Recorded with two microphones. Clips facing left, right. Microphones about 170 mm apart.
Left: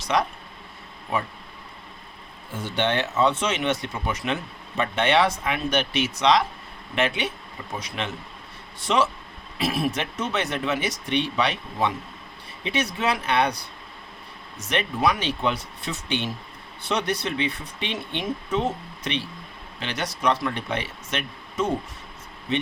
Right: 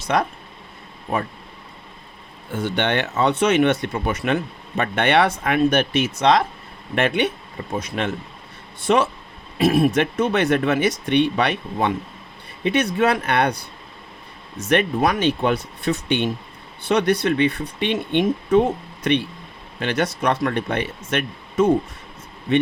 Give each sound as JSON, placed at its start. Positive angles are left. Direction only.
{"t": 0.0, "sound": "speech", "side_deg": -55}
{"t": 2.6, "sound": "speech", "side_deg": -65}
{"t": 14.7, "sound": "speech", "side_deg": -55}